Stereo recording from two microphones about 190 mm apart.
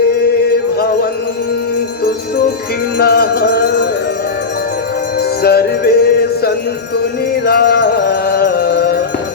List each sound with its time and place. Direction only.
0.4 s chant: 55° left (ahead or behind)
3.0 s music: 55° left (ahead or behind)
5.4 s music: 55° left (ahead or behind)